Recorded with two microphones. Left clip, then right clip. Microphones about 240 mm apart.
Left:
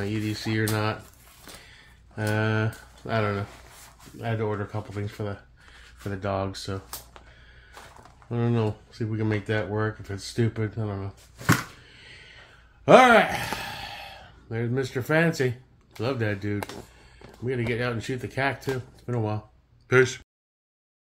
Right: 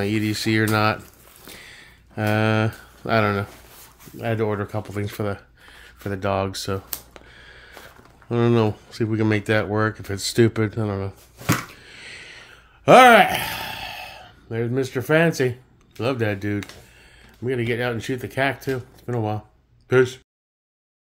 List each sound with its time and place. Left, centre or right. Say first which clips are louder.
0.0 s speech: right 7 dB; right
6.0 s speech: right 6 dB; right
7.4 s a sound: right 9 dB; right
8.3 s speech: right 8 dB; right
11.8 s a sound: right 8 dB; right
16.0 s speech: right 5 dB; right